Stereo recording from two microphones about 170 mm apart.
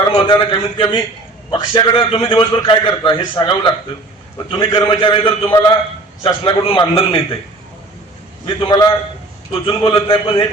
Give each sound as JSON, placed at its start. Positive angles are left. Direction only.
{"t": 0.1, "sound": "a man's voice", "side_deg": 30}
{"t": 5.5, "sound": "a man's voice", "side_deg": 20}
{"t": 6.2, "sound": "a man's voice", "side_deg": 30}
{"t": 8.4, "sound": "a man's voice", "side_deg": 30}